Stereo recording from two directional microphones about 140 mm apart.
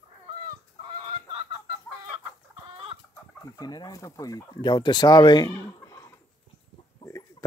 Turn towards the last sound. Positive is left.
turn(degrees=25)  # may be behind; listen again after turning